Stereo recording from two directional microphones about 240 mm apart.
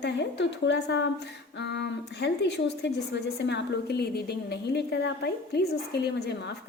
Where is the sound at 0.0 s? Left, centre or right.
Left.